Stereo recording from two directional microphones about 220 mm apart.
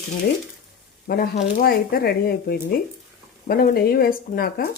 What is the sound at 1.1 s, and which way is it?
Speech, 45° left (ahead or behind).